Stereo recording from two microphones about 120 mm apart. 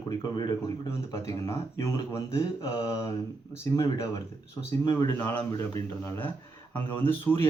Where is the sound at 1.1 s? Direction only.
25° left (ahead or behind).